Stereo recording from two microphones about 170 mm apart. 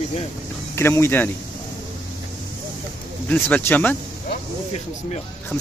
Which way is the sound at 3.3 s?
10° left (ahead or behind).